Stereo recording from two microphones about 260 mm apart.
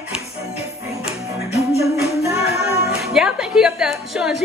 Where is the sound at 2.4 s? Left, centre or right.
Left.